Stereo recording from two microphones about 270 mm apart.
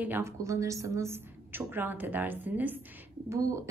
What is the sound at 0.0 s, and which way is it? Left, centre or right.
A woman's voice, centre.